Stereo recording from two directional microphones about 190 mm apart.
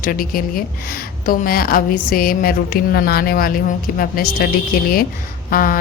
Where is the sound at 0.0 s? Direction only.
50° left (ahead or behind).